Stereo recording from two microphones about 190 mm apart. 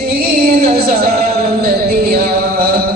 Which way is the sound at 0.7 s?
55° right (ahead or behind).